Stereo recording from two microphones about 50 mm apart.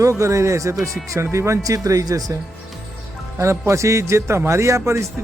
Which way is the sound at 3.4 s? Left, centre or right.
Right.